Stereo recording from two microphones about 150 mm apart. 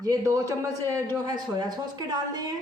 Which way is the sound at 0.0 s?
20° right (ahead or behind).